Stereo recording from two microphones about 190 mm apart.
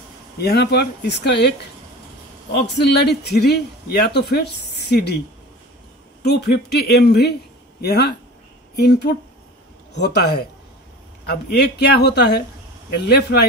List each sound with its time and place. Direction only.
0.4 s speech: 60° left (ahead or behind)
2.5 s speech: 60° left (ahead or behind)
6.2 s speech: 60° left (ahead or behind)